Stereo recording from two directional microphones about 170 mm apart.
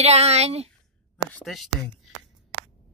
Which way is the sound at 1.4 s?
Centre (ahead or behind).